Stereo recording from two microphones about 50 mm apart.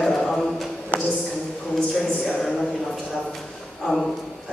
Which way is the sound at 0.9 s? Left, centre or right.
Right.